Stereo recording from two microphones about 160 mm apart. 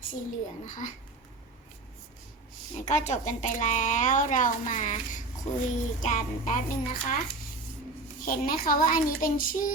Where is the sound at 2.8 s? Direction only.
45° left (ahead or behind).